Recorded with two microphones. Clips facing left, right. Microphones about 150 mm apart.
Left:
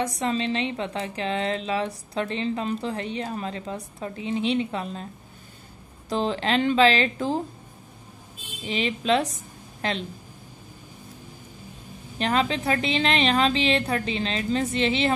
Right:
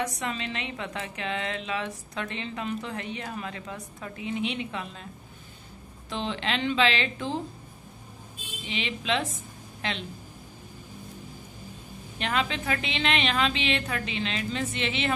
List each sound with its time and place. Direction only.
0.0 s a woman's voice: 30° left (ahead or behind)
6.0 s a woman's voice: 40° left (ahead or behind)
8.6 s a woman's voice: 40° left (ahead or behind)
12.2 s a woman's voice: 35° left (ahead or behind)